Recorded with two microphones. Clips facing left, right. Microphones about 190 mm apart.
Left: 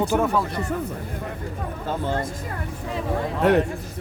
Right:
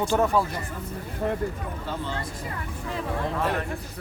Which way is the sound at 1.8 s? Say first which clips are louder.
Left 7 dB; 50° left (ahead or behind).